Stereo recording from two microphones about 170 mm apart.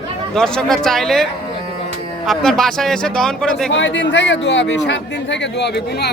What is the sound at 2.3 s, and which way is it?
A man's voice, centre (ahead or behind).